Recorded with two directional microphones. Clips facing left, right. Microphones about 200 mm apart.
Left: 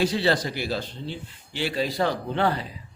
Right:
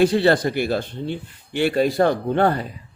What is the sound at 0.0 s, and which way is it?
Speech, 55° right (ahead or behind).